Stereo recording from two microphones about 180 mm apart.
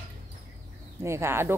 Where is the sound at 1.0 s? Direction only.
15° right (ahead or behind).